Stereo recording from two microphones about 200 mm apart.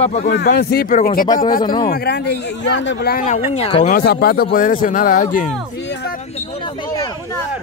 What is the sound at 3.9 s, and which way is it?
Speech, 50° left (ahead or behind).